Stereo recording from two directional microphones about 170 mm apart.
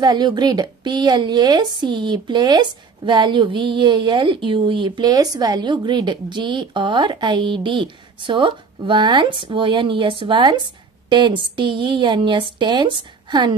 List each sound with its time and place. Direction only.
0.0 s a woman's voice: 25° right (ahead or behind)